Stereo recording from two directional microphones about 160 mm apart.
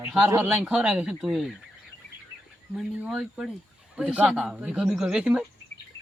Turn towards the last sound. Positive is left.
turn(degrees=-5)  # may be behind; listen again after turning